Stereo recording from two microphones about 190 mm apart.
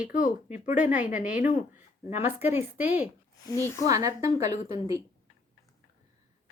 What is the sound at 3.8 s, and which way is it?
Speech, 20° right (ahead or behind).